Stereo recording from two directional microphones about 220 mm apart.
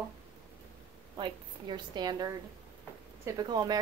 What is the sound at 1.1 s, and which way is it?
A woman's voice, 20° right (ahead or behind).